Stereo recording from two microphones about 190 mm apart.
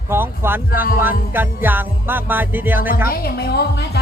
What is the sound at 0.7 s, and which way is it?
Music, 50° left (ahead or behind).